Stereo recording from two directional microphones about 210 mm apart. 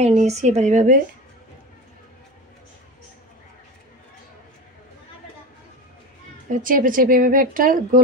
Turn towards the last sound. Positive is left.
turn(degrees=-40)  # may be behind; listen again after turning